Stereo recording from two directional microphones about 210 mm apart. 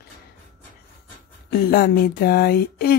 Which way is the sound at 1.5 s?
45° left (ahead or behind).